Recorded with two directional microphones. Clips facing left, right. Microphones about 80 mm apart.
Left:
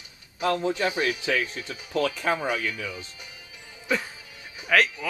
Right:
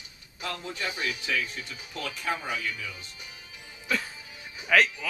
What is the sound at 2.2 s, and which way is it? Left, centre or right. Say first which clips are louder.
Speech: left 5 dB; left.